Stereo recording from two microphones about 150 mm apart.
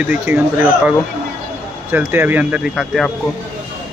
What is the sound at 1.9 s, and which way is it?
Speech, 15° right (ahead or behind).